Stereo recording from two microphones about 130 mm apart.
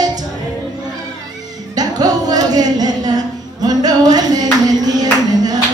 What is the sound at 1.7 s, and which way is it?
Music, 30° right (ahead or behind).